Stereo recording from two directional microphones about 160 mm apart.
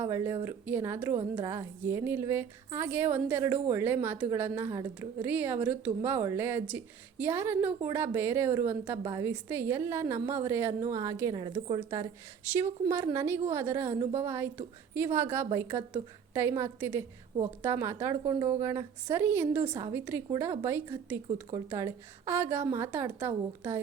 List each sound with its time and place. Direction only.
0.0 s a woman's voice: 15° right (ahead or behind)
18.2 s a woman's voice: 30° right (ahead or behind)